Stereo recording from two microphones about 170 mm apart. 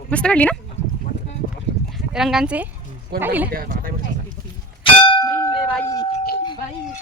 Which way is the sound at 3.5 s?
55° right (ahead or behind).